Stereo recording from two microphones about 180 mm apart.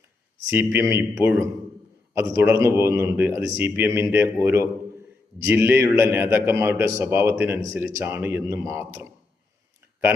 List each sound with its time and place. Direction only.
0.5 s a man's voice: 10° right (ahead or behind)